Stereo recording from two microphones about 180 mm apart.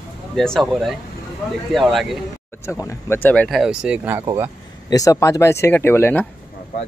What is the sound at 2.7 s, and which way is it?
Speech, 15° left (ahead or behind).